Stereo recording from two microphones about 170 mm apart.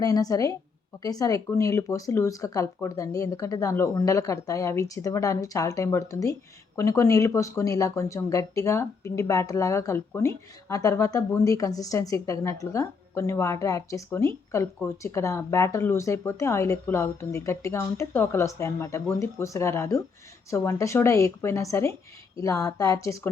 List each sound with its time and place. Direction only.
0.0 s speech: 20° left (ahead or behind)